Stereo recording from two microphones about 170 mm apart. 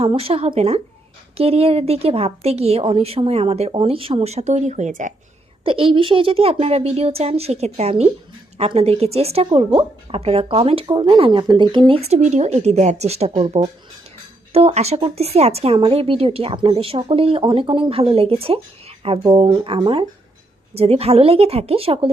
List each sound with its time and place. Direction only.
0.0 s a woman's voice: 35° right (ahead or behind)
5.6 s a woman's voice: 30° right (ahead or behind)